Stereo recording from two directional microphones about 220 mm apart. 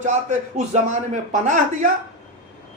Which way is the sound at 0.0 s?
35° right (ahead or behind).